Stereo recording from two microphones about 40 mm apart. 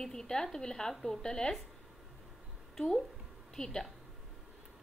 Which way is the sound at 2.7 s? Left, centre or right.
Centre.